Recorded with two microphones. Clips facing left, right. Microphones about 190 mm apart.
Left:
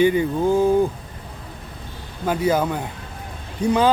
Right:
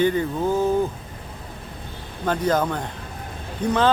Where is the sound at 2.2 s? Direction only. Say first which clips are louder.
Left 1 dB; 10° left (ahead or behind).